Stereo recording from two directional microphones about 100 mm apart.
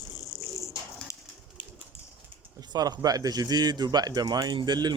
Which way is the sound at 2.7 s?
40° right (ahead or behind).